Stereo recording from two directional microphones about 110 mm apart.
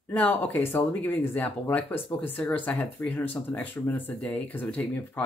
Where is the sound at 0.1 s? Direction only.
15° left (ahead or behind).